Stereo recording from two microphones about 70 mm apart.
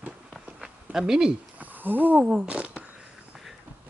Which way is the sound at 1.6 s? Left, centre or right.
Right.